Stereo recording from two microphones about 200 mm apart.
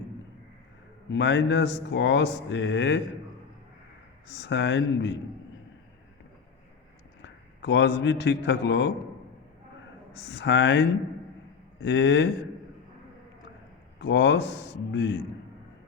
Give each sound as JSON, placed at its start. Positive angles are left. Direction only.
{"t": 1.1, "sound": "speech", "side_deg": 60}
{"t": 4.3, "sound": "speech", "side_deg": 60}
{"t": 7.2, "sound": "a man's voice", "side_deg": 65}
{"t": 10.1, "sound": "speech", "side_deg": 60}
{"t": 14.0, "sound": "speech", "side_deg": 60}